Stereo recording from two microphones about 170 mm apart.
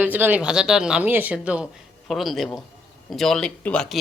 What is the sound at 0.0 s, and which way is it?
A woman's voice, 10° right (ahead or behind).